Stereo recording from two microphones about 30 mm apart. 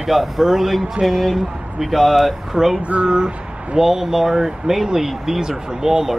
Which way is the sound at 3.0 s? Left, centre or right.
Right.